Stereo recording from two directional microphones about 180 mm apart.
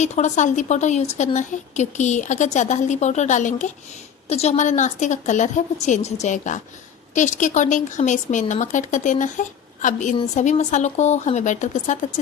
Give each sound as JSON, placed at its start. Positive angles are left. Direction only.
{"t": 0.0, "sound": "a woman's voice", "side_deg": 40}